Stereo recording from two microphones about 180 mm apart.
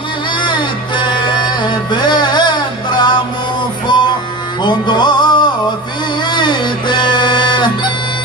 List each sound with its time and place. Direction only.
0.9 s music: 25° left (ahead or behind)